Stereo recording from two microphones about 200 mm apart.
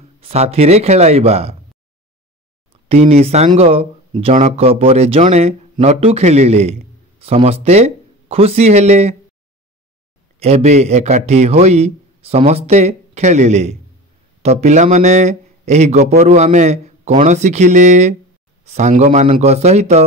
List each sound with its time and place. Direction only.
0.2 s speech: 30° right (ahead or behind)
2.9 s speech: 30° right (ahead or behind)
10.4 s a man's voice: 30° right (ahead or behind)